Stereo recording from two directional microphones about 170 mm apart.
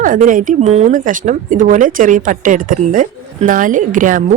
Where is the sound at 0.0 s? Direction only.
50° right (ahead or behind).